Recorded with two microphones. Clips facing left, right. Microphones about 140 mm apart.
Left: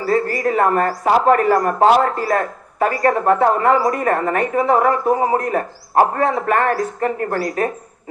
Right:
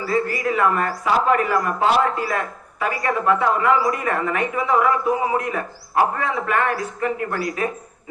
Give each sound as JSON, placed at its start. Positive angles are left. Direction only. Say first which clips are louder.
{"t": 0.0, "sound": "speech", "louder": "left 4 dB", "side_deg": 40}